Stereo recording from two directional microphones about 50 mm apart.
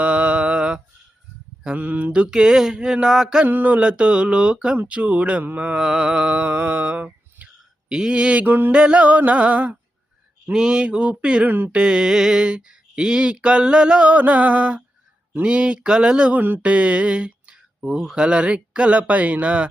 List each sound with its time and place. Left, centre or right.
0.0 s mantra: right
1.8 s a sound: right
2.3 s speech: centre
3.4 s a sound: right
3.8 s speech: right
7.9 s speech: centre
8.4 s a sound: right
8.7 s speech: centre
10.5 s speech: centre
11.4 s a sound: right
11.7 s speech: centre
14.1 s speech: right